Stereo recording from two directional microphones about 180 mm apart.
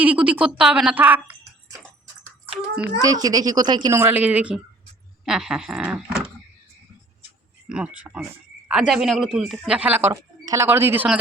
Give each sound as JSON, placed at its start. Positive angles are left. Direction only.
{"t": 0.0, "sound": "speech", "side_deg": -5}
{"t": 3.0, "sound": "a woman's voice", "side_deg": -20}
{"t": 4.0, "sound": "speech", "side_deg": -10}
{"t": 7.7, "sound": "speech", "side_deg": -5}